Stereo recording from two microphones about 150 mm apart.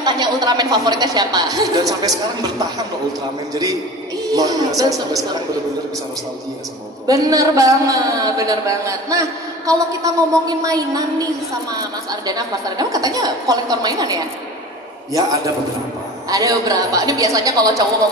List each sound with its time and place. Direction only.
0.0 s a woman's voice: 30° right (ahead or behind)
4.3 s a woman's voice: 25° right (ahead or behind)
7.1 s a woman's voice: 25° right (ahead or behind)
16.3 s a woman's voice: 25° right (ahead or behind)